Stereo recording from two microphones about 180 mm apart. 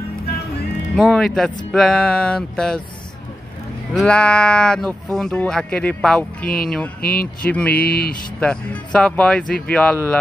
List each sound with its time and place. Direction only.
0.9 s speech: centre (ahead or behind)
3.9 s speech: 5° left (ahead or behind)
7.0 s speech: 55° left (ahead or behind)
7.4 s speech: 5° left (ahead or behind)
7.8 s speech: 55° left (ahead or behind)
8.4 s speech: 5° left (ahead or behind)